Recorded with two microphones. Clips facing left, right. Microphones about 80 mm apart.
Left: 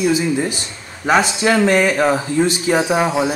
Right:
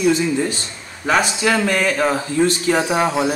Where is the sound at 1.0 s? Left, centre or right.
Centre.